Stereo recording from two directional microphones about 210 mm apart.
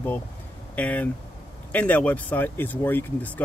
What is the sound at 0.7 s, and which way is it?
Speech, 5° left (ahead or behind).